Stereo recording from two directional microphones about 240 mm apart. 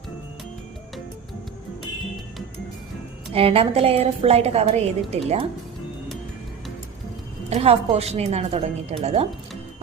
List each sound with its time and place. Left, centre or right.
3.3 s a woman's voice: right
7.5 s a woman's voice: right